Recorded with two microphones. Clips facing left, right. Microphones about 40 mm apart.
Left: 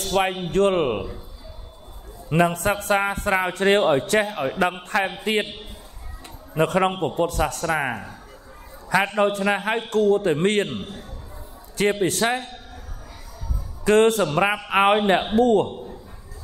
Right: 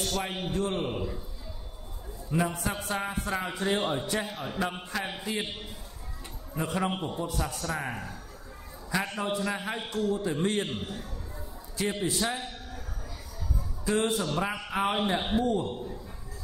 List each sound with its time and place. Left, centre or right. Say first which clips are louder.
0.0 s a man's voice: left 10 dB; left
0.5 s a man's voice: left 10 dB; left
2.2 s a man's voice: left 9 dB; left
6.5 s a man's voice: left 10 dB; left
8.9 s a man's voice: left 10 dB; left
10.7 s a man's voice: left 3 dB; centre
11.7 s a man's voice: left 9 dB; left
13.8 s a man's voice: left 11 dB; left